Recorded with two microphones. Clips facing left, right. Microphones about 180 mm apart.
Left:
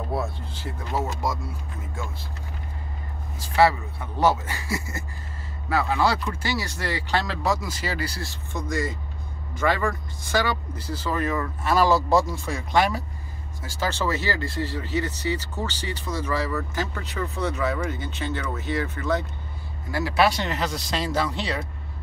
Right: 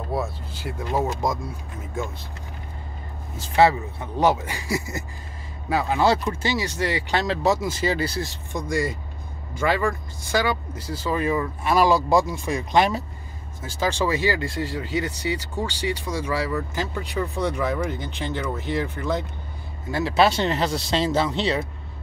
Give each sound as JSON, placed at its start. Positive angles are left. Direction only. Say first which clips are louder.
{"t": 0.1, "sound": "vehicle", "louder": "right 4 dB", "side_deg": 0}
{"t": 0.7, "sound": "speech", "louder": "right 4 dB", "side_deg": -15}
{"t": 3.3, "sound": "speech", "louder": "right 2 dB", "side_deg": -20}
{"t": 19.9, "sound": "speech", "louder": "right 2 dB", "side_deg": -25}